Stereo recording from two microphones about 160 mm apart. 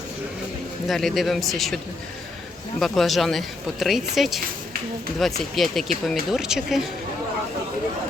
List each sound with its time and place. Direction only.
0.9 s speech: centre (ahead or behind)
2.8 s speech: centre (ahead or behind)